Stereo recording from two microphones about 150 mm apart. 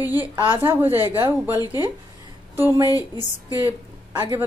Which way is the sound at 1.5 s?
25° left (ahead or behind).